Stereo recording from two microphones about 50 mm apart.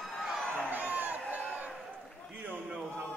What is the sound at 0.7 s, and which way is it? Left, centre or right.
Crowd, right.